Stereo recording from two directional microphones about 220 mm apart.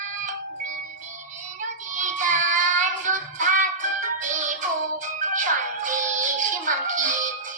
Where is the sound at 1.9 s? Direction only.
35° right (ahead or behind).